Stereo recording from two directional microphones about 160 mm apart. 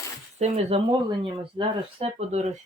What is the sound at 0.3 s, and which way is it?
Speech, 40° right (ahead or behind).